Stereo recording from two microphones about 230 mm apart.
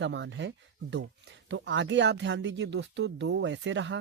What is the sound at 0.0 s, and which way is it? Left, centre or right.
Speech, right.